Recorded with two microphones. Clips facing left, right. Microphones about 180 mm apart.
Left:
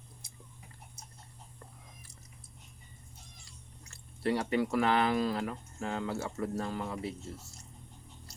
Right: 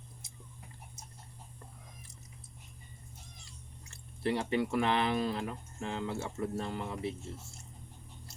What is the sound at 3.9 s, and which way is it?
Speech, 25° right (ahead or behind).